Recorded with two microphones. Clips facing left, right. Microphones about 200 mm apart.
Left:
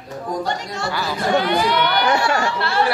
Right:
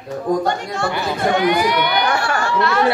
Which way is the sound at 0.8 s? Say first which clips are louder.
Right 2 dB; 20° right (ahead or behind).